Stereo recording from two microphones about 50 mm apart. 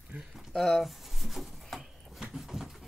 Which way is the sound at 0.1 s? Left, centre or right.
Right.